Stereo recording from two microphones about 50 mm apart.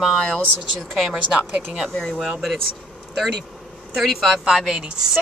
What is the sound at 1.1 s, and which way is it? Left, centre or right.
Speech, right.